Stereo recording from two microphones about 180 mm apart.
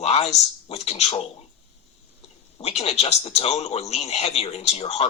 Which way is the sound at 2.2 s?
35° left (ahead or behind).